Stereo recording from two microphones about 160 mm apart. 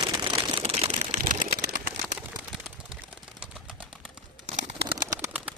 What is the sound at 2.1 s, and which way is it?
Bird, 5° right (ahead or behind).